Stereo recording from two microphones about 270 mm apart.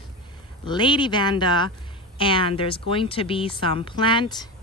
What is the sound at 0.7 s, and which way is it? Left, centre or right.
Speech, centre.